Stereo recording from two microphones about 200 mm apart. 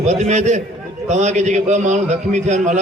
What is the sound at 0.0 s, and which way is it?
A man's voice, 35° right (ahead or behind).